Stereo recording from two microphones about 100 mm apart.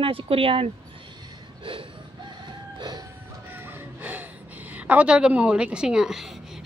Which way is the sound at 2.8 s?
40° right (ahead or behind).